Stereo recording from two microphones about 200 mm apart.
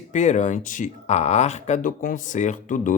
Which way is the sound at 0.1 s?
40° left (ahead or behind).